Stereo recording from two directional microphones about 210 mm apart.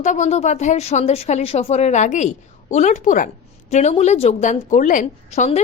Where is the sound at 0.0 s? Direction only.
35° left (ahead or behind).